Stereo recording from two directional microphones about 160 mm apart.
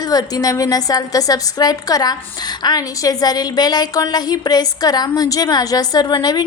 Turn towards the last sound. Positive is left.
turn(degrees=25)  # may be behind; listen again after turning